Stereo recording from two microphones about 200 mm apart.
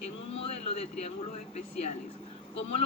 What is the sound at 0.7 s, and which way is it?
Speech, 30° left (ahead or behind).